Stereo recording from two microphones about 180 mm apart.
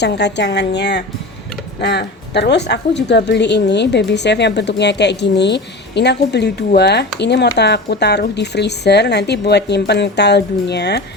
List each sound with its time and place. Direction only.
0.0 s a woman's voice: 70° left (ahead or behind)